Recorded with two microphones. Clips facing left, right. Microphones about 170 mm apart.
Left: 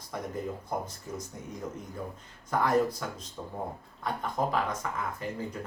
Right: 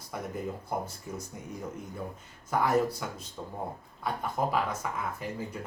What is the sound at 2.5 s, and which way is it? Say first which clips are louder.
Speech: even; 10° right (ahead or behind).